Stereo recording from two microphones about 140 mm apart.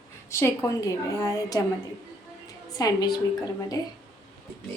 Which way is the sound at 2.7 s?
30° left (ahead or behind).